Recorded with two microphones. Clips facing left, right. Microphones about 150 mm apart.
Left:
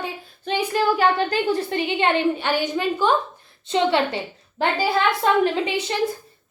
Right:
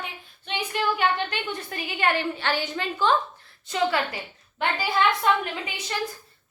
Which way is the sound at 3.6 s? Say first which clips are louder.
Left 5 dB; 25° left (ahead or behind).